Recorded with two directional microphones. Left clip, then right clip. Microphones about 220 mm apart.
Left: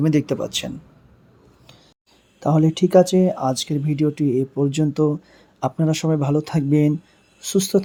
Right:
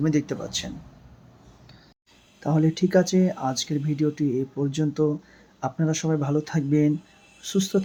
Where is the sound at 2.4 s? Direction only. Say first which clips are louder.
Left 5 dB; 30° left (ahead or behind).